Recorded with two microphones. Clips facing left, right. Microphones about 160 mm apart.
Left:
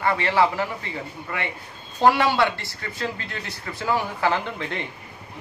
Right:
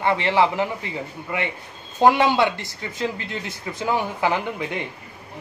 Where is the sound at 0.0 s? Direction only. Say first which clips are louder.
Right 1 dB; 20° right (ahead or behind).